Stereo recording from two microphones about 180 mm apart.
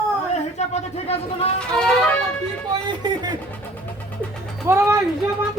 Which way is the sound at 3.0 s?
25° right (ahead or behind).